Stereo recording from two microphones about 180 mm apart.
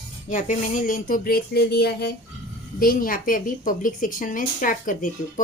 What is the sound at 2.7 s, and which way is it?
A woman's voice, 50° left (ahead or behind).